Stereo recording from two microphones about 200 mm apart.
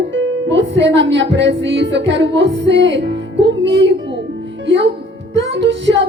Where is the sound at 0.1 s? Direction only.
70° right (ahead or behind).